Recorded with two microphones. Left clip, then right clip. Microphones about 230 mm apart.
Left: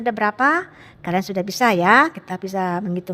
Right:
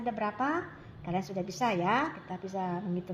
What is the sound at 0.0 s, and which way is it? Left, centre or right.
A woman's voice, left.